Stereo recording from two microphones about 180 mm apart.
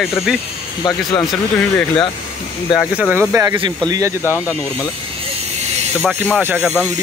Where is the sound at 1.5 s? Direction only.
15° left (ahead or behind).